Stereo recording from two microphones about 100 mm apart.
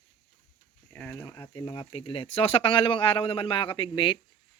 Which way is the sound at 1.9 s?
65° left (ahead or behind).